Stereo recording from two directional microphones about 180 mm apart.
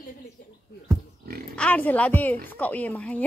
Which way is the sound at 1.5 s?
10° left (ahead or behind).